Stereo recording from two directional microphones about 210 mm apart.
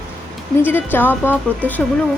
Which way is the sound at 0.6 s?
10° left (ahead or behind).